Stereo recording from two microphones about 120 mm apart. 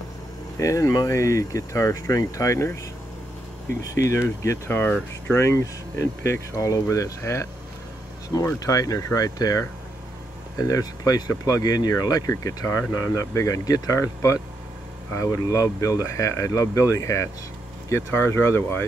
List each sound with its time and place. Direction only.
0.6 s speech: 25° left (ahead or behind)
3.8 s speech: 25° left (ahead or behind)